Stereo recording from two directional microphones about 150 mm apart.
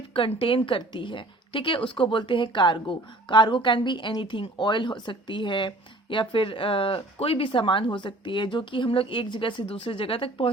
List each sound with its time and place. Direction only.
0.1 s speech: 35° left (ahead or behind)